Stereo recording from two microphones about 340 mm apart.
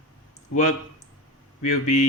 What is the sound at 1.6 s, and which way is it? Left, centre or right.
Speech, left.